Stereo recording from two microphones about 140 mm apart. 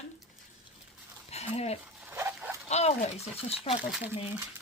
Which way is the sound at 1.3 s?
50° left (ahead or behind).